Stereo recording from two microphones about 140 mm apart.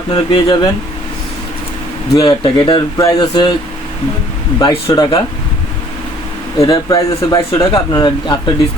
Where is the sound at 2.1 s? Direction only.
35° left (ahead or behind).